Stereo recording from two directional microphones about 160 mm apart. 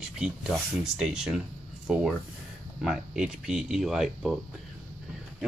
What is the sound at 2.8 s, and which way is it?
Speech, 5° right (ahead or behind).